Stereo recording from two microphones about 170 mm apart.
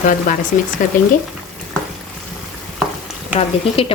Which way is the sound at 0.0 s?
50° left (ahead or behind).